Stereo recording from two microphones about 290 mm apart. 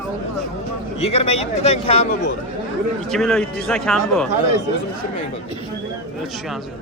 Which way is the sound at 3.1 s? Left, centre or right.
Centre.